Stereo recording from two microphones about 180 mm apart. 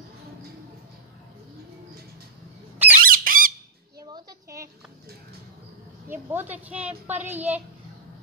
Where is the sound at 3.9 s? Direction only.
20° right (ahead or behind).